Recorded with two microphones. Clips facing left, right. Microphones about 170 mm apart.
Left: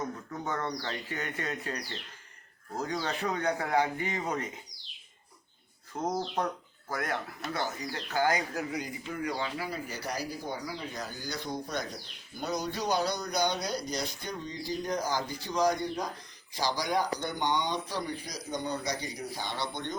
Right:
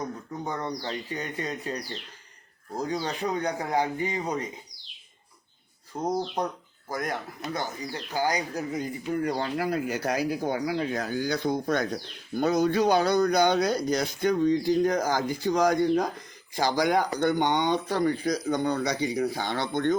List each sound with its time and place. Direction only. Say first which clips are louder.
0.4 s speech: right 2 dB; 15° right (ahead or behind)
5.9 s speech: right 4 dB; 15° right (ahead or behind)
9.1 s speech: right 6 dB; 50° right (ahead or behind)
10.7 s speech: right 10 dB; 80° right; by 20.0 s 50° right (ahead or behind)